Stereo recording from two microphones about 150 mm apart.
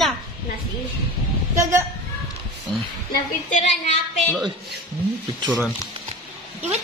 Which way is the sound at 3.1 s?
55° left (ahead or behind).